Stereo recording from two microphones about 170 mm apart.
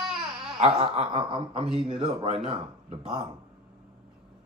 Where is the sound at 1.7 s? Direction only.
25° right (ahead or behind).